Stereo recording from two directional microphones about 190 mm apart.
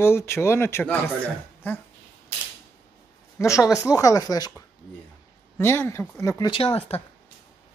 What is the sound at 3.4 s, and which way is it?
Speech, 15° left (ahead or behind).